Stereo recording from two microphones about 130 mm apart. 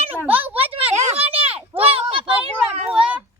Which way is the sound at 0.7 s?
45° right (ahead or behind).